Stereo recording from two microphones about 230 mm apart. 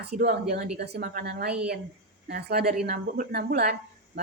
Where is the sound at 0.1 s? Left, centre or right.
Right.